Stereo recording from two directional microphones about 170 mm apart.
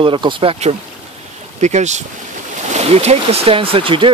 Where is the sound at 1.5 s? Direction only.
45° right (ahead or behind).